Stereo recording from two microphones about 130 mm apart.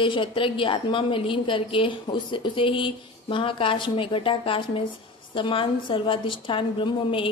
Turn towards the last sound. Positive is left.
turn(degrees=40)  # may be behind; listen again after turning